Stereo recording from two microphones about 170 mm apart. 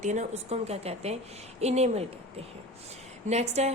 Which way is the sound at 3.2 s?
40° right (ahead or behind).